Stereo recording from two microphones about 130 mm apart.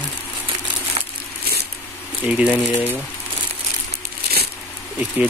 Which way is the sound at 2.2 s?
10° right (ahead or behind).